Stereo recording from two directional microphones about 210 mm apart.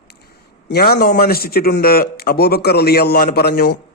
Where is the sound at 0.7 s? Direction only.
50° left (ahead or behind).